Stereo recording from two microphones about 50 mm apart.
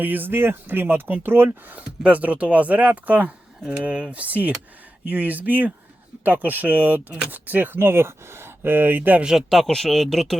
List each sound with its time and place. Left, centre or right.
0.0 s speech: right
1.7 s speech: right
7.8 s speech: right
9.6 s speech: centre